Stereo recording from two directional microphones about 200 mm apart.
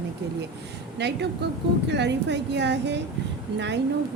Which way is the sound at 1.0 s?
55° right (ahead or behind).